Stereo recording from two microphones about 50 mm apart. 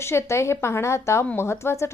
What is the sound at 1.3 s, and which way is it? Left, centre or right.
Speech, left.